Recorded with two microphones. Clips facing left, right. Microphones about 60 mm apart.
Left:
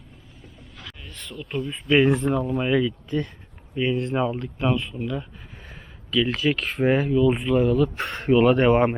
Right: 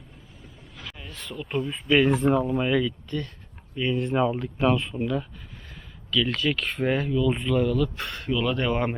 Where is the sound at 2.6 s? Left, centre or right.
Centre.